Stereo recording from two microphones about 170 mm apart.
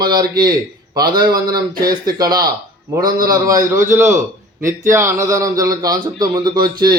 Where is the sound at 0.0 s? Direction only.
25° right (ahead or behind).